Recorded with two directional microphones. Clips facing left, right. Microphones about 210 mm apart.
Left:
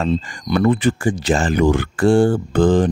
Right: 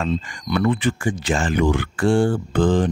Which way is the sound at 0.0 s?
35° left (ahead or behind).